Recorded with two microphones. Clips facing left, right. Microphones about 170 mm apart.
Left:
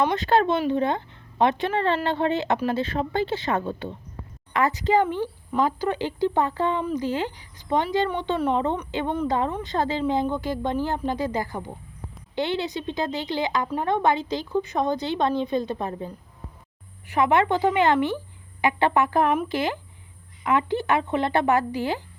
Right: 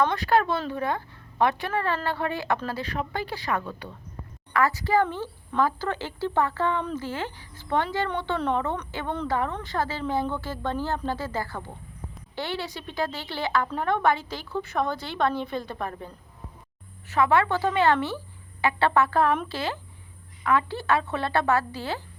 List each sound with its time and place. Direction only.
0.0 s a woman's voice: 20° left (ahead or behind)